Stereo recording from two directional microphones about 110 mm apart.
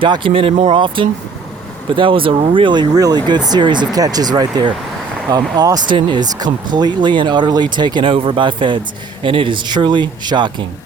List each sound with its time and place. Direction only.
0.0 s speech: 50° right (ahead or behind)
1.0 s speech: 50° right (ahead or behind)